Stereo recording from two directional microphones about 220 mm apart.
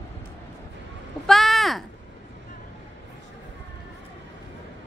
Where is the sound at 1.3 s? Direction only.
Centre (ahead or behind).